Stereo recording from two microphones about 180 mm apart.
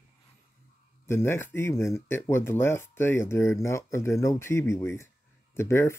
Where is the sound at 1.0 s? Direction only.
15° left (ahead or behind).